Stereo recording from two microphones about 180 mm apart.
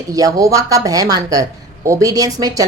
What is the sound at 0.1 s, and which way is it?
A woman's voice, 20° right (ahead or behind).